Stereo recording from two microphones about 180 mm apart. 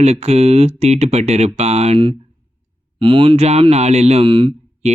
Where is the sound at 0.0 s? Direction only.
35° right (ahead or behind).